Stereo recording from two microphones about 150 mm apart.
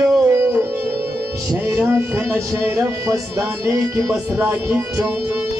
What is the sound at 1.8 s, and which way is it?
Music, 15° right (ahead or behind).